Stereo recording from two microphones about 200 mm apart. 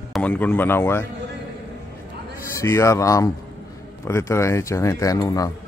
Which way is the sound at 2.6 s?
15° left (ahead or behind).